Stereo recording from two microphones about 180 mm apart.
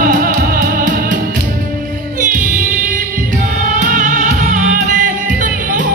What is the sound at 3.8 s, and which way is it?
Music, 45° right (ahead or behind).